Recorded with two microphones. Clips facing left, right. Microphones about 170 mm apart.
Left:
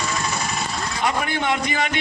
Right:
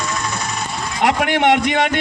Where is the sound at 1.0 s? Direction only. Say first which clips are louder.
Right 8 dB; 85° right.